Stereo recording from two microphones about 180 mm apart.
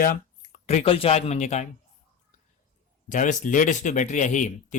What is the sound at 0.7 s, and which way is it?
Speech, 35° left (ahead or behind).